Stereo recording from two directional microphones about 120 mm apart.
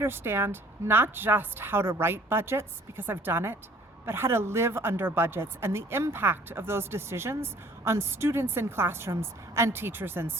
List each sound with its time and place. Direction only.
0.0 s speech: 20° right (ahead or behind)